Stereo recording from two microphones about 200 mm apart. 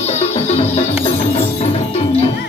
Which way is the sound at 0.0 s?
35° left (ahead or behind).